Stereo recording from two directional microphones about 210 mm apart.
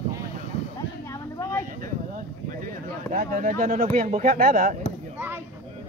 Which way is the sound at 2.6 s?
40° right (ahead or behind).